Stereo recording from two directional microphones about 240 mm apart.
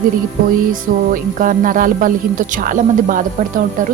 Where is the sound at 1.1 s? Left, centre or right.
Right.